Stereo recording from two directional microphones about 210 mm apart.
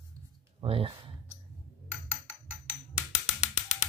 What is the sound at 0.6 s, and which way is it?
Speech, 25° right (ahead or behind).